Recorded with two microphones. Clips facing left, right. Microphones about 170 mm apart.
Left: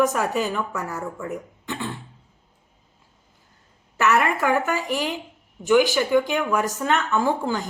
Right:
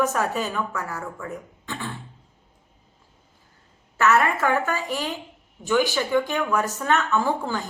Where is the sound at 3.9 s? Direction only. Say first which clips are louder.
Even; 15° left (ahead or behind).